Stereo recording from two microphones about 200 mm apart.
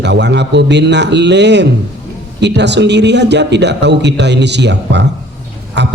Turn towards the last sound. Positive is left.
turn(degrees=-60)  # may be behind; listen again after turning